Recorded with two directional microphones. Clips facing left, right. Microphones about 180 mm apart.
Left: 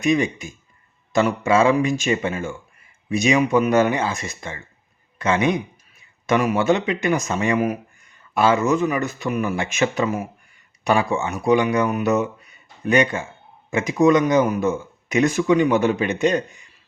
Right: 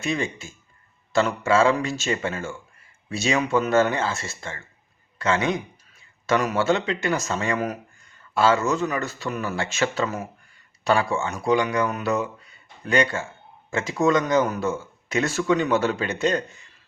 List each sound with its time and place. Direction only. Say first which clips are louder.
0.0 s speech: left 7 dB; 15° left (ahead or behind)